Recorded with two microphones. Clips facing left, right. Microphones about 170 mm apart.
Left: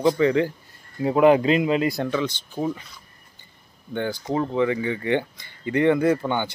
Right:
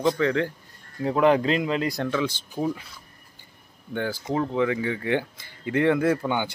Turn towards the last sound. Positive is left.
turn(degrees=-5)  # may be behind; listen again after turning